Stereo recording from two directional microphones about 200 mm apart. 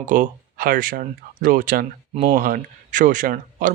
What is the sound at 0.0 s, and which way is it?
Speech, 40° right (ahead or behind).